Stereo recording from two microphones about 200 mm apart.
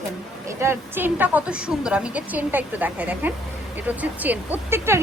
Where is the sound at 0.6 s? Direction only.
10° right (ahead or behind).